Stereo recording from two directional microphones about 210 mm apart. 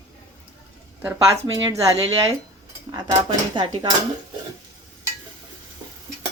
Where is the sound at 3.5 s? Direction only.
20° right (ahead or behind).